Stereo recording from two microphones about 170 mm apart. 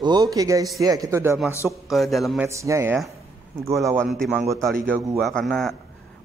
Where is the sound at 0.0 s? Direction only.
25° right (ahead or behind).